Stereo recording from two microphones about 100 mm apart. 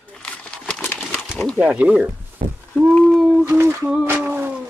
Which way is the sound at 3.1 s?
Centre (ahead or behind).